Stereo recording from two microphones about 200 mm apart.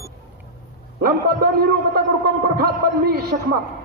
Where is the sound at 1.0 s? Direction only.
50° right (ahead or behind).